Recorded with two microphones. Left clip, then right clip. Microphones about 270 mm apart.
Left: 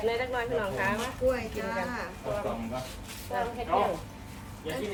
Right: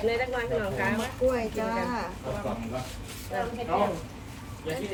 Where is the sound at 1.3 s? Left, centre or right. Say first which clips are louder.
Right 4 dB; centre.